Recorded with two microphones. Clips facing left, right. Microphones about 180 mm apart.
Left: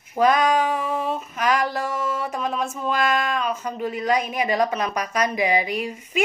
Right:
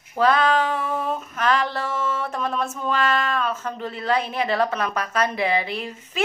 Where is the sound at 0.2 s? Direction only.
15° left (ahead or behind).